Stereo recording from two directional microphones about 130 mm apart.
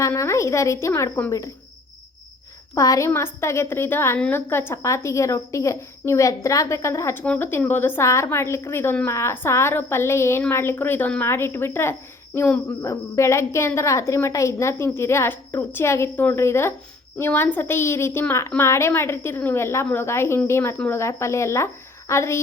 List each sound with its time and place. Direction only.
0.0 s speech: 20° left (ahead or behind)
2.7 s speech: 25° left (ahead or behind)